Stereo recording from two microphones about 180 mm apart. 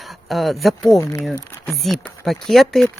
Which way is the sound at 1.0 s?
15° left (ahead or behind).